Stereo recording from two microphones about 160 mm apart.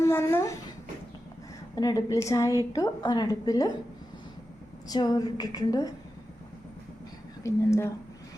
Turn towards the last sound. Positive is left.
turn(degrees=15)  # may be behind; listen again after turning